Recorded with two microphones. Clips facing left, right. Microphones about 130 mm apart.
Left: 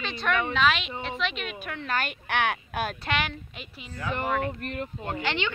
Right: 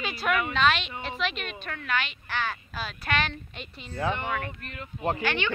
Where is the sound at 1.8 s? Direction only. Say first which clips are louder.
Left 1 dB; 40° left (ahead or behind).